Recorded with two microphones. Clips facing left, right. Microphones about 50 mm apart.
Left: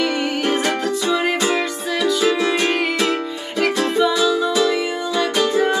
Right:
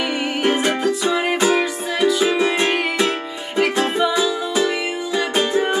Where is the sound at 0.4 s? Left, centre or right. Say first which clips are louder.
Right 4 dB; right.